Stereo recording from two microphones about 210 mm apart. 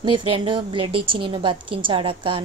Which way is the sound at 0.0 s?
25° right (ahead or behind).